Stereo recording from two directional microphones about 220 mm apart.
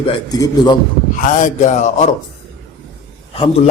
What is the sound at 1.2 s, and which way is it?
Speech, 35° left (ahead or behind).